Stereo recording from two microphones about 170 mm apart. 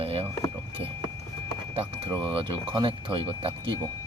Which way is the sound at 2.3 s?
30° right (ahead or behind).